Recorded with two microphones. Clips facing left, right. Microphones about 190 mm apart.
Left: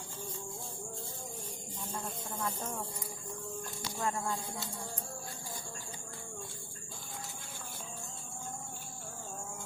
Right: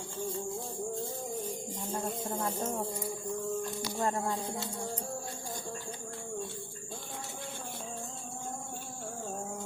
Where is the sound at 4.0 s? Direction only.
35° right (ahead or behind).